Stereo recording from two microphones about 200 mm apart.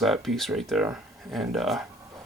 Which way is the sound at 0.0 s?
Centre (ahead or behind).